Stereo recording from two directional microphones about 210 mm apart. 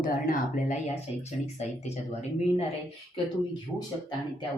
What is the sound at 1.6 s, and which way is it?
Speech, 30° left (ahead or behind).